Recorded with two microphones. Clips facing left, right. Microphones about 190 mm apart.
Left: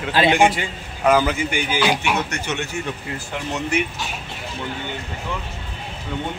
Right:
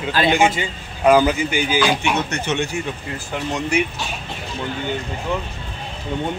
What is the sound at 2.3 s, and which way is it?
Speech, 20° right (ahead or behind).